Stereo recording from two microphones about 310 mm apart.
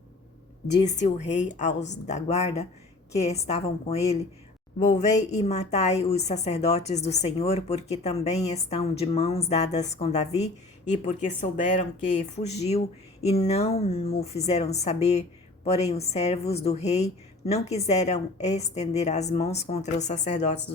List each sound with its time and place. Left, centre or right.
0.8 s a woman's voice: left